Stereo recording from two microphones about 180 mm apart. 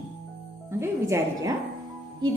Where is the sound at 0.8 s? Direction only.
15° right (ahead or behind).